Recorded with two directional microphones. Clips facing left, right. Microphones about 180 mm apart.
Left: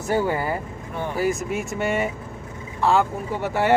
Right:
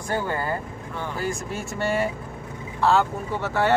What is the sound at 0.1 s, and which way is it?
Speech, 10° left (ahead or behind).